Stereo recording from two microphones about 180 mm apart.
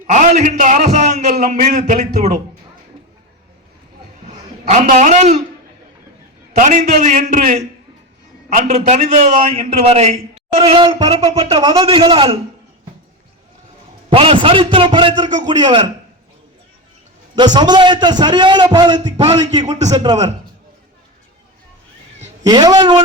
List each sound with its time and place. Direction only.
0.1 s a man's voice: 45° right (ahead or behind)
4.7 s a man's voice: 45° right (ahead or behind)
6.6 s a man's voice: 45° right (ahead or behind)
8.5 s a man's voice: 40° right (ahead or behind)
14.1 s a man's voice: 30° right (ahead or behind)
17.3 s a man's voice: 25° right (ahead or behind)
22.4 s a man's voice: 20° right (ahead or behind)